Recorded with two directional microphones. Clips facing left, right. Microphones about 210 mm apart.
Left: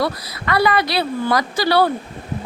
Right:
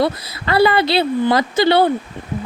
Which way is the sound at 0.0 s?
30° right (ahead or behind).